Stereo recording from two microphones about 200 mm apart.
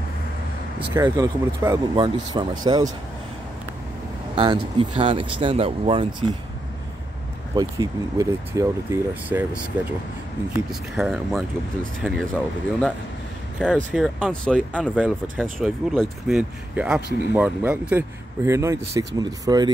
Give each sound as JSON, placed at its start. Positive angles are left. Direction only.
{"t": 0.9, "sound": "speech", "side_deg": -15}
{"t": 4.4, "sound": "speech", "side_deg": -25}
{"t": 7.5, "sound": "speech", "side_deg": -15}
{"t": 10.7, "sound": "speech", "side_deg": 0}
{"t": 13.6, "sound": "speech", "side_deg": -5}